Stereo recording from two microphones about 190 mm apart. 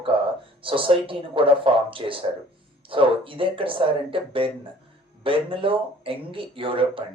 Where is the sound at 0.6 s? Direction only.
30° right (ahead or behind).